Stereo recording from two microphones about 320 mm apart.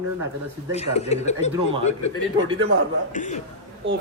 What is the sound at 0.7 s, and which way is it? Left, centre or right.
Speech, centre.